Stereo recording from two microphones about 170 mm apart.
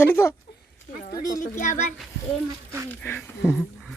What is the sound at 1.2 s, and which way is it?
Speech, 50° left (ahead or behind).